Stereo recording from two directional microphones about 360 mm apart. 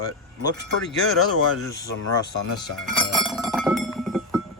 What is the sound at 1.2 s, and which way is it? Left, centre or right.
Speech, left.